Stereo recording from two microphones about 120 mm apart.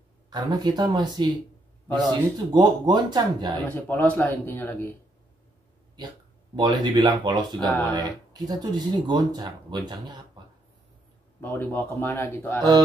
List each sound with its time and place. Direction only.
0.3 s speech: 35° right (ahead or behind)
3.6 s a man's voice: 15° left (ahead or behind)
6.5 s speech: 40° right (ahead or behind)
11.4 s a man's voice: 15° left (ahead or behind)